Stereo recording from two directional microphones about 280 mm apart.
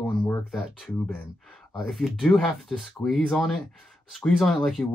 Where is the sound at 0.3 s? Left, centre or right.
Centre.